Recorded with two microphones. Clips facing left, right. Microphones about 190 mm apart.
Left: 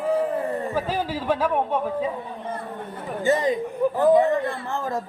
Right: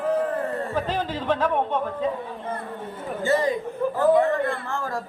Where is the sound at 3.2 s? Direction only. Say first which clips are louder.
Left 1 dB; 20° left (ahead or behind).